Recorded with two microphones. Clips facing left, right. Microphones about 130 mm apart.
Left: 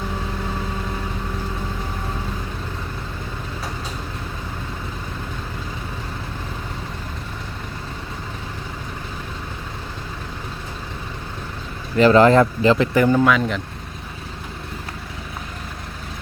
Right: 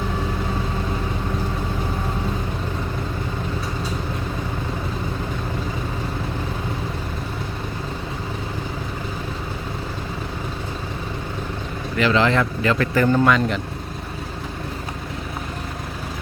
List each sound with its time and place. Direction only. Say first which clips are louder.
11.9 s speech: left 6 dB; 40° left (ahead or behind)
12.7 s speech: right 1 dB; 20° left (ahead or behind)
13.2 s speech: even; centre (ahead or behind)